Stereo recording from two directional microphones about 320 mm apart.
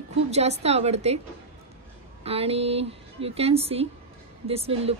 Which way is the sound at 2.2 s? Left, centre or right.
Centre.